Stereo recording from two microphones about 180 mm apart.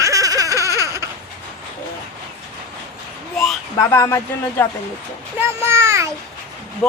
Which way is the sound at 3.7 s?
15° left (ahead or behind).